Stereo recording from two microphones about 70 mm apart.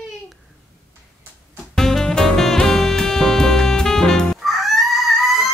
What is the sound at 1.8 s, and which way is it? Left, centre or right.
Music, centre.